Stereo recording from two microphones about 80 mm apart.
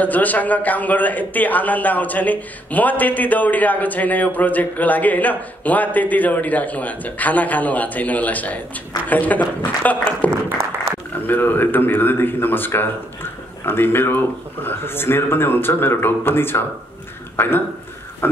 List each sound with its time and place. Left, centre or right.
0.0 s a man's voice: left